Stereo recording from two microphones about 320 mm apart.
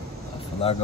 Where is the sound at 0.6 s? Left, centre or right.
Centre.